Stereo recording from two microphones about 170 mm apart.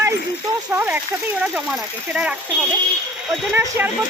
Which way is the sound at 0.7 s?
10° right (ahead or behind).